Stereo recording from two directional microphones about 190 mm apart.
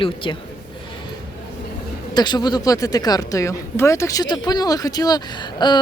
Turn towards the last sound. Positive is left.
turn(degrees=20)  # may be behind; listen again after turning